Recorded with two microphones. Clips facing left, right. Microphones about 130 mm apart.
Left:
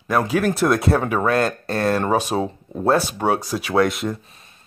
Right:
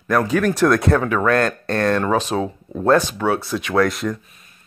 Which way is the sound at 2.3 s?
30° left (ahead or behind).